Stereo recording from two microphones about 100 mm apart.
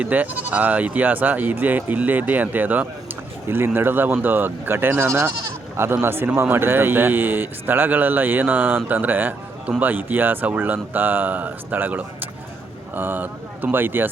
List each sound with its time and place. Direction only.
0.0 s a man's voice: 15° right (ahead or behind)